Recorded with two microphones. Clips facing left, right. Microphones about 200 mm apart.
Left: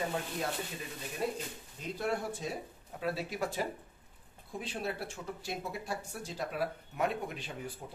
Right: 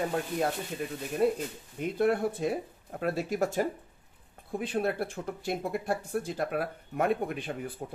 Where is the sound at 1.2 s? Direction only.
55° right (ahead or behind).